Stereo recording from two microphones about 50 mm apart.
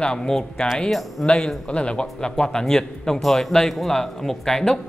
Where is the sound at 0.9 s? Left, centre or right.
Centre.